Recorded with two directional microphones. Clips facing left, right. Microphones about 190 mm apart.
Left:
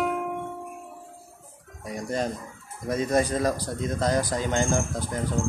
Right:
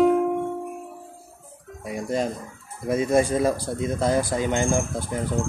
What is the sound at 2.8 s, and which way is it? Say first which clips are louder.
Speech: right 3 dB; 10° right (ahead or behind).